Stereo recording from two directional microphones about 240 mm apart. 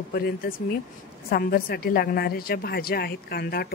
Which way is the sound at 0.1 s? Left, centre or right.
Left.